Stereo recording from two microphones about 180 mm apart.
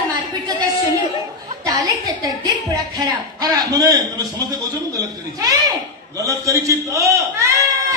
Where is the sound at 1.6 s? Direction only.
20° right (ahead or behind).